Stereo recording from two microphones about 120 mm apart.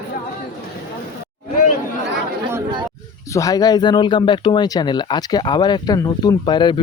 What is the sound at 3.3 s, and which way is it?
Speech, 30° left (ahead or behind).